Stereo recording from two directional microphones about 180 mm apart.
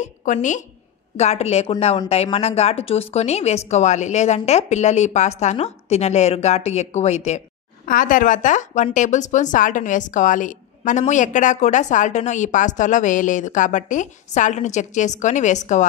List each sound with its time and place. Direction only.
0.0 s a woman's voice: 45° left (ahead or behind)